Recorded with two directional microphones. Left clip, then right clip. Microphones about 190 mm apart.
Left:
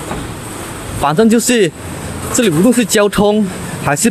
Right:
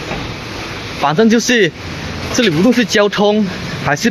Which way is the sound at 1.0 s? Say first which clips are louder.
Left 1 dB; 15° left (ahead or behind).